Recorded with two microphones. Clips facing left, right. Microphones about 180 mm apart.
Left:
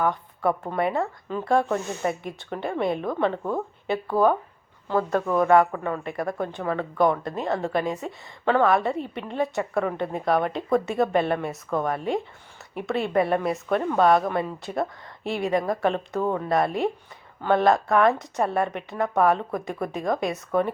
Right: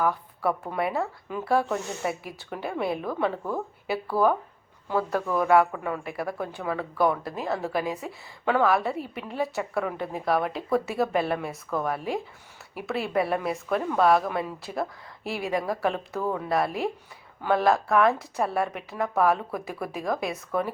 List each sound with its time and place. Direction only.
0.0 s a woman's voice: 5° right (ahead or behind)
4.2 s speech: 20° left (ahead or behind)
4.9 s a woman's voice: 5° right (ahead or behind)